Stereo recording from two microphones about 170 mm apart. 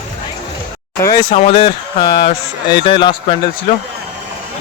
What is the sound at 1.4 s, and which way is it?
Speech, 35° left (ahead or behind).